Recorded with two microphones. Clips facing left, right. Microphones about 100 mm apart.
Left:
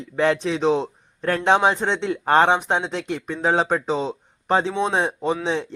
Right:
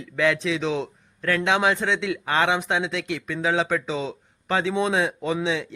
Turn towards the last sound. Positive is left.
turn(degrees=30)  # may be behind; listen again after turning